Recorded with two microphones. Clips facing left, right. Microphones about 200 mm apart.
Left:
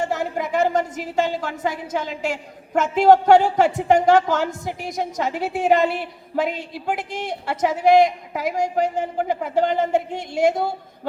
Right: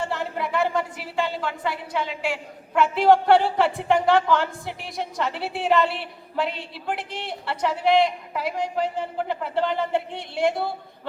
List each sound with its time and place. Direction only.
0.0 s a woman's voice: 45° left (ahead or behind)